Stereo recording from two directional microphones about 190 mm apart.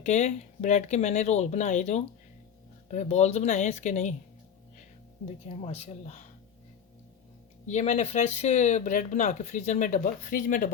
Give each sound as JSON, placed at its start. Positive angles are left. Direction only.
{"t": 0.0, "sound": "speech", "side_deg": 40}
{"t": 5.2, "sound": "speech", "side_deg": 35}
{"t": 7.7, "sound": "speech", "side_deg": 35}